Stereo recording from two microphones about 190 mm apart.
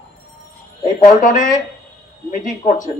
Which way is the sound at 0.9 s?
40° left (ahead or behind).